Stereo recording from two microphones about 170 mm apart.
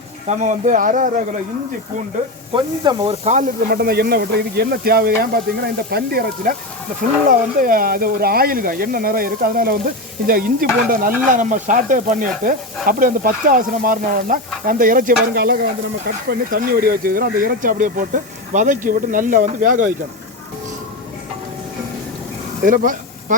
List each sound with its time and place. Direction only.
0.3 s sizzle: 45° right (ahead or behind)
2.8 s speech: 30° right (ahead or behind)
3.7 s speech: 70° right (ahead or behind)
7.3 s speech: 55° right (ahead or behind)
10.2 s sizzle: 60° right (ahead or behind)
22.6 s sizzle: 50° right (ahead or behind)